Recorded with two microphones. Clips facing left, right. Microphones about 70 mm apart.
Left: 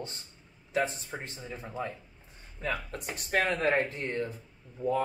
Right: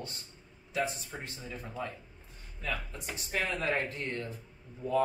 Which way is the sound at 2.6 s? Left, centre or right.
Left.